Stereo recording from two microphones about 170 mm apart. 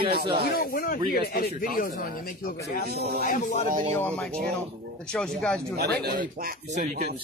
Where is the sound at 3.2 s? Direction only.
45° left (ahead or behind).